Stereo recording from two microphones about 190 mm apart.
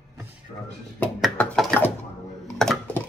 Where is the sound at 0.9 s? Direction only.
5° left (ahead or behind).